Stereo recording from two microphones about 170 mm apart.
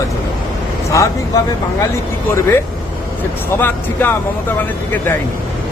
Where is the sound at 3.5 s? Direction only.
10° left (ahead or behind).